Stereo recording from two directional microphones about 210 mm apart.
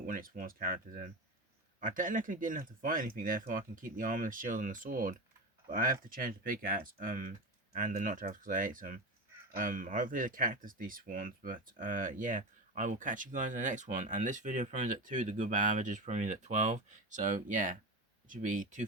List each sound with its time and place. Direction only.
0.0 s speech: 40° right (ahead or behind)